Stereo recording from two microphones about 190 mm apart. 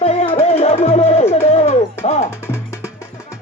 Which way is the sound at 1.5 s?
35° left (ahead or behind).